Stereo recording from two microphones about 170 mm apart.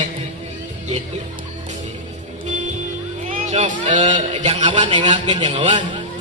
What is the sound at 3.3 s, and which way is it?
A man's voice, 45° right (ahead or behind).